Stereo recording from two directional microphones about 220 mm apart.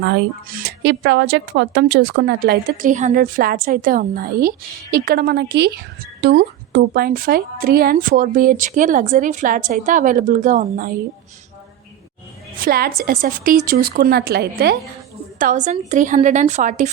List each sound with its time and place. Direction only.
0.0 s speech: 45° right (ahead or behind)
12.5 s a woman's voice: 40° right (ahead or behind)
15.4 s speech: 35° right (ahead or behind)